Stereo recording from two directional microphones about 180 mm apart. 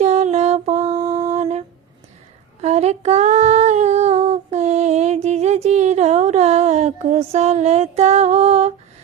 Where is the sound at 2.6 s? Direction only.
35° right (ahead or behind).